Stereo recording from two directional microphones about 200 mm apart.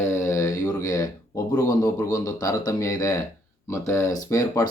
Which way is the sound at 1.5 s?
15° left (ahead or behind).